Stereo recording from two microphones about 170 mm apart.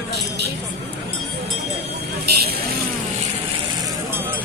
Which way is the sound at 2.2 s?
65° right (ahead or behind).